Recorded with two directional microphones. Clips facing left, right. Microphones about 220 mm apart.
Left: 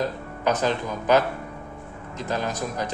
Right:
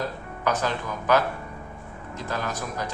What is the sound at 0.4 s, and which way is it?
Speech, 20° left (ahead or behind).